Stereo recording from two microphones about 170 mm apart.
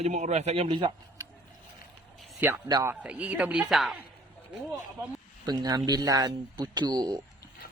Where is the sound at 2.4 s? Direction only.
10° right (ahead or behind).